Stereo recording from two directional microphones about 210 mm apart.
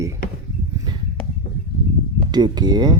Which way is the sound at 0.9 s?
20° right (ahead or behind).